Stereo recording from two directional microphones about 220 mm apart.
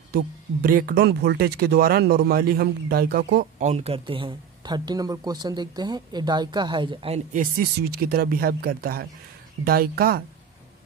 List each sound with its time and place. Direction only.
0.1 s speech: 40° right (ahead or behind)
3.6 s speech: 30° right (ahead or behind)
7.5 s speech: 45° right (ahead or behind)